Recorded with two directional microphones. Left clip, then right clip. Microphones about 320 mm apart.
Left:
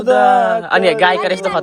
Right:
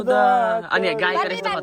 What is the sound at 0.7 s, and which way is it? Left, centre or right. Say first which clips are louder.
Speech: left 8 dB; centre.